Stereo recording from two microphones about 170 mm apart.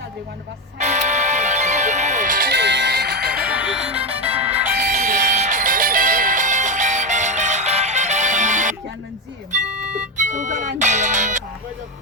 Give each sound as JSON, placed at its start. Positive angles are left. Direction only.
{"t": 0.8, "sound": "music", "side_deg": -45}
{"t": 2.5, "sound": "music", "side_deg": -85}
{"t": 3.3, "sound": "music", "side_deg": -5}
{"t": 4.7, "sound": "music", "side_deg": -60}
{"t": 4.9, "sound": "music", "side_deg": -50}
{"t": 10.2, "sound": "speech", "side_deg": -45}